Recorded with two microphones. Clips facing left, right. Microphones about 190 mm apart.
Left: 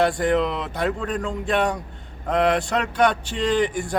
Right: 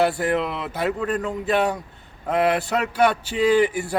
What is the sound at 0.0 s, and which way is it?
Speech, 5° right (ahead or behind).